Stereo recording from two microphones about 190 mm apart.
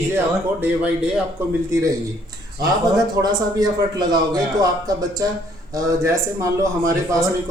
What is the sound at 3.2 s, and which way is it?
A man's voice, 20° right (ahead or behind).